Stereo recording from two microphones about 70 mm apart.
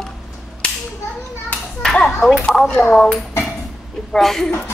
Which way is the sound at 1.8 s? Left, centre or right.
Centre.